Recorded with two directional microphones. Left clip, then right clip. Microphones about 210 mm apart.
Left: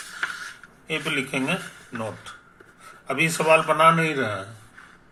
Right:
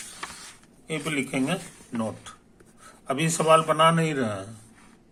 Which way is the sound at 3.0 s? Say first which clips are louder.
Left 2 dB; 25° right (ahead or behind).